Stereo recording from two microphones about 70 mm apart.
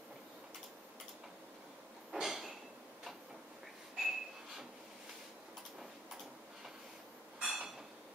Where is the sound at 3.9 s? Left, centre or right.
Centre.